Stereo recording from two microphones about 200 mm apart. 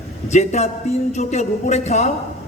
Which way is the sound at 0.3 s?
35° left (ahead or behind).